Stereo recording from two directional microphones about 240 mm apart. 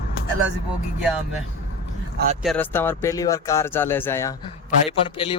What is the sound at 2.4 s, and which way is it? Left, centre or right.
A man's voice, centre.